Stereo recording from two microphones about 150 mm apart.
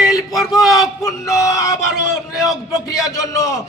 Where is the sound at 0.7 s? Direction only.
20° left (ahead or behind).